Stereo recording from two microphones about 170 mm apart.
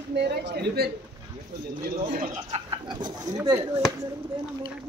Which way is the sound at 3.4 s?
15° right (ahead or behind).